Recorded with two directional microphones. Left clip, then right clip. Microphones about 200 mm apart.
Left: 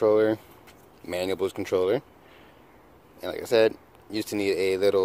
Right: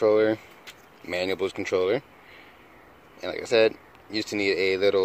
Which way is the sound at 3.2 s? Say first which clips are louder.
Even; 15° left (ahead or behind).